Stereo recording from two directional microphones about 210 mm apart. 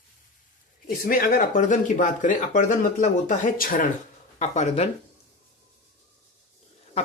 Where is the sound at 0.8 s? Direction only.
45° left (ahead or behind).